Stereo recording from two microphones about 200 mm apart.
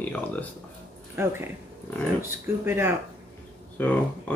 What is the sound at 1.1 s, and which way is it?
Speech, 10° right (ahead or behind).